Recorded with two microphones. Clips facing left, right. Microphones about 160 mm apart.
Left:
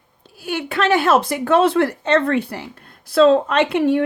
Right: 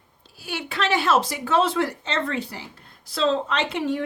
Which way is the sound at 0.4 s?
55° left (ahead or behind).